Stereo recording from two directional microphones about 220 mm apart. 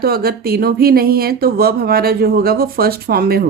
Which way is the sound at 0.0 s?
45° right (ahead or behind).